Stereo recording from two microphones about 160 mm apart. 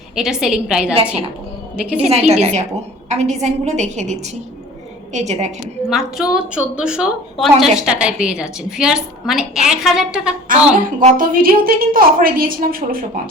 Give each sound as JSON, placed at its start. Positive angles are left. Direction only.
{"t": 0.2, "sound": "a woman's voice", "side_deg": -5}
{"t": 0.9, "sound": "a woman's voice", "side_deg": -40}
{"t": 1.7, "sound": "a woman's voice", "side_deg": -5}
{"t": 2.0, "sound": "a woman's voice", "side_deg": -40}
{"t": 5.9, "sound": "a woman's voice", "side_deg": -5}
{"t": 11.0, "sound": "a woman's voice", "side_deg": -60}